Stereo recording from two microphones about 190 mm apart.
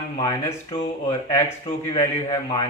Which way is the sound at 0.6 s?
30° left (ahead or behind).